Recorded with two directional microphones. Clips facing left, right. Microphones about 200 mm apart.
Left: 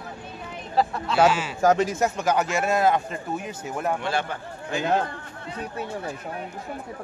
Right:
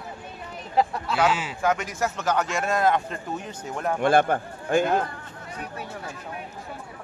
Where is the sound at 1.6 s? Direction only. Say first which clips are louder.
Left 7 dB; 35° left (ahead or behind); by 3.9 s 10° left (ahead or behind).